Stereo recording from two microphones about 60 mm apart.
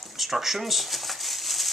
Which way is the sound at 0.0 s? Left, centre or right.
Centre.